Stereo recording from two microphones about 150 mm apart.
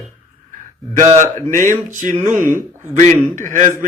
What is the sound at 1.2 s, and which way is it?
A man's voice, 55° right (ahead or behind).